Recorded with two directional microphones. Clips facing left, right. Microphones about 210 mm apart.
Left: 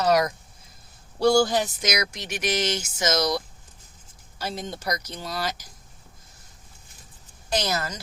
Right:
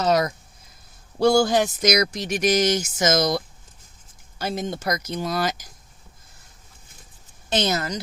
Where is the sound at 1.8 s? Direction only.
35° right (ahead or behind).